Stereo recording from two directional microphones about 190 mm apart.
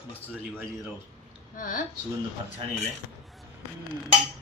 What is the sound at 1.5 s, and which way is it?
Speech, 45° left (ahead or behind).